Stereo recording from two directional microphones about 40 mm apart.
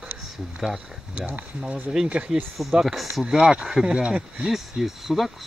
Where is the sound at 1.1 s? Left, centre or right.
Right.